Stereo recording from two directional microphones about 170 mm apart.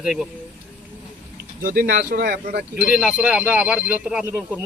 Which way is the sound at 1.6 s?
55° right (ahead or behind).